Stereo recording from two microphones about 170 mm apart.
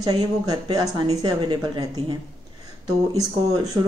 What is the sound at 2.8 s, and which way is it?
Speech, 20° right (ahead or behind).